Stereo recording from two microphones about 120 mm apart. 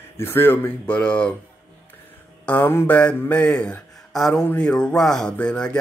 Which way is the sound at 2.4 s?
15° left (ahead or behind).